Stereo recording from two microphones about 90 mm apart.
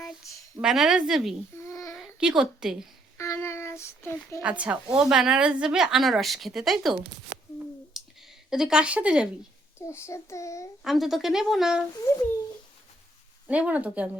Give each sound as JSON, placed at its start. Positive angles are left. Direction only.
{"t": 0.6, "sound": "a woman's voice", "side_deg": -5}
{"t": 1.5, "sound": "a sound", "side_deg": 35}
{"t": 2.0, "sound": "a sound", "side_deg": -5}
{"t": 3.2, "sound": "child singing", "side_deg": 30}
{"t": 4.4, "sound": "a woman's voice", "side_deg": -15}
{"t": 7.9, "sound": "a sound", "side_deg": -5}
{"t": 9.7, "sound": "child singing", "side_deg": 30}
{"t": 10.8, "sound": "a woman's voice", "side_deg": 0}
{"t": 12.1, "sound": "a child's voice", "side_deg": 30}
{"t": 13.5, "sound": "speech", "side_deg": -15}